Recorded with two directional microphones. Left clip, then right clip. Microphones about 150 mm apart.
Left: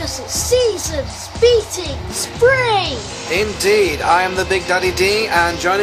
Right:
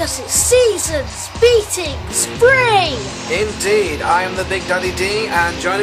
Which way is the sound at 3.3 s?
35° left (ahead or behind).